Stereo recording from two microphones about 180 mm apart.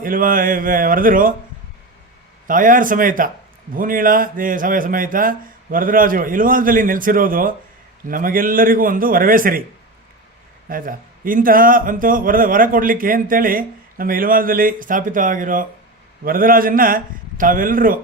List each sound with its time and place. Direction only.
0.0 s a man's voice: 50° right (ahead or behind)
2.5 s a man's voice: 50° right (ahead or behind)
10.7 s a man's voice: 50° right (ahead or behind)